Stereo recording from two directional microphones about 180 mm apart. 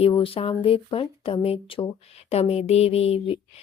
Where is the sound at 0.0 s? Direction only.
30° left (ahead or behind).